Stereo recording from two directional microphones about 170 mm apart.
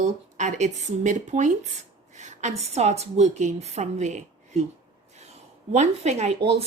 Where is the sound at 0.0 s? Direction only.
45° right (ahead or behind).